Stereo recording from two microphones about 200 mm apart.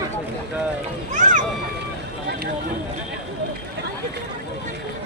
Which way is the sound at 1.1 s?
40° right (ahead or behind).